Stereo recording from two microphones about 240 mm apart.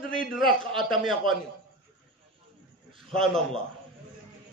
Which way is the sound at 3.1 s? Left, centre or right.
Centre.